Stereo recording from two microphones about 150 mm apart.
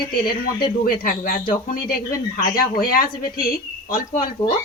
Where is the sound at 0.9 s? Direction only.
70° left (ahead or behind).